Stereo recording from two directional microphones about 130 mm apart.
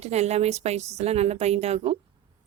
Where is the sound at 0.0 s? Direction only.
55° right (ahead or behind).